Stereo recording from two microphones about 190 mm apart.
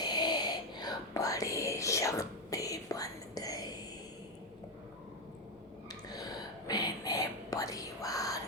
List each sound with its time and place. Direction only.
0.0 s whispering: 20° left (ahead or behind)
5.9 s whispering: 20° left (ahead or behind)